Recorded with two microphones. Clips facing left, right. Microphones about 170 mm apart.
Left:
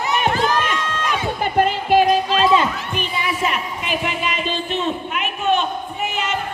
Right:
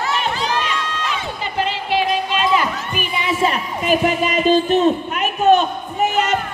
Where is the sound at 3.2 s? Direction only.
25° right (ahead or behind).